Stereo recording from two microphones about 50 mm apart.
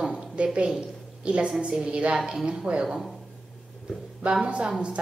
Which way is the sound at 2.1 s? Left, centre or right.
Centre.